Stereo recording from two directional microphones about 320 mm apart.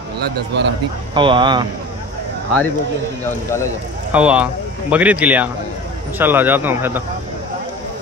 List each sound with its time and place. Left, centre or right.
0.5 s speech: right
1.1 s speech: centre
4.1 s speech: centre